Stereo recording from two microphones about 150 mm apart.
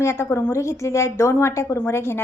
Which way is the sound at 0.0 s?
15° left (ahead or behind).